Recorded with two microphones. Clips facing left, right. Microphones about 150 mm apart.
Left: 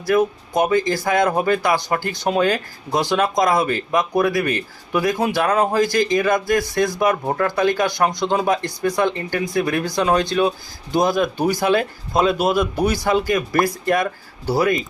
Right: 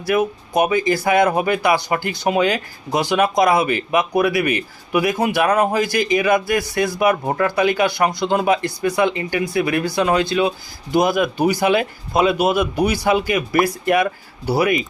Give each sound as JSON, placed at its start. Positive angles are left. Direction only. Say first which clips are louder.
{"t": 0.1, "sound": "speech", "louder": "left 1 dB", "side_deg": -15}
{"t": 9.0, "sound": "speech", "louder": "right 3 dB", "side_deg": -10}